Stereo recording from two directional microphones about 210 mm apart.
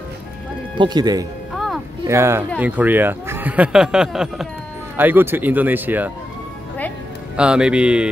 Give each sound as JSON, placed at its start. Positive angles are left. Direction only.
{"t": 0.7, "sound": "speech", "side_deg": -20}
{"t": 1.5, "sound": "music", "side_deg": 0}
{"t": 2.0, "sound": "speech", "side_deg": -10}
{"t": 7.3, "sound": "a man's voice", "side_deg": -5}